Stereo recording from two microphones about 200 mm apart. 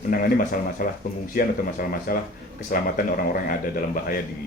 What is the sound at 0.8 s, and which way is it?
Speech, 45° left (ahead or behind).